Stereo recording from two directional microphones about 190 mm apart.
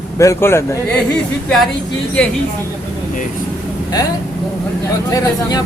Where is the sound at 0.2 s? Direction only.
15° left (ahead or behind).